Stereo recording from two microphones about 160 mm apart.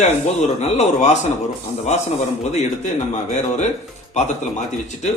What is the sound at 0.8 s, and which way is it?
Speech, 45° left (ahead or behind).